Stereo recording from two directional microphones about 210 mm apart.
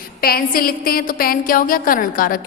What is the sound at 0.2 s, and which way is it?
A woman's voice, 45° left (ahead or behind).